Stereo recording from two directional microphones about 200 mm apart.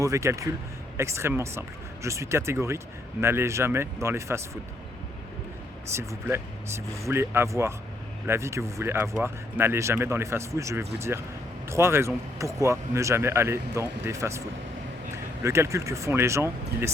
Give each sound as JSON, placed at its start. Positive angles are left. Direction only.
{"t": 0.0, "sound": "speech", "side_deg": -15}
{"t": 5.9, "sound": "speech", "side_deg": -15}